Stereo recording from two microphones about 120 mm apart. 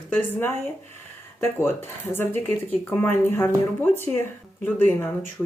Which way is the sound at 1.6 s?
20° left (ahead or behind).